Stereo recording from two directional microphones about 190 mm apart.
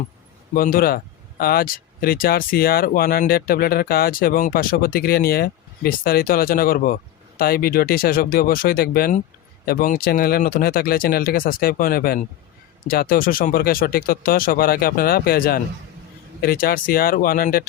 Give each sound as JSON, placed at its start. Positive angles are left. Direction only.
{"t": 0.5, "sound": "speech", "side_deg": 50}